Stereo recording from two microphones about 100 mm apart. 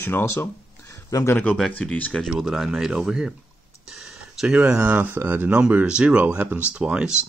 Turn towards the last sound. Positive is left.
turn(degrees=-10)  # may be behind; listen again after turning